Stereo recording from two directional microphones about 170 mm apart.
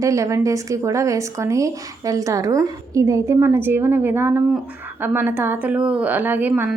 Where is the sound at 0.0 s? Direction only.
20° right (ahead or behind).